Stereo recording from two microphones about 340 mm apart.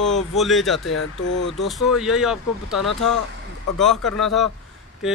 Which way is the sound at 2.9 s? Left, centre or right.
Left.